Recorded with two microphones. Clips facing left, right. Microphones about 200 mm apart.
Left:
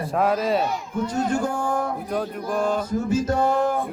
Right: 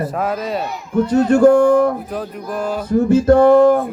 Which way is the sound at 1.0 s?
65° right (ahead or behind).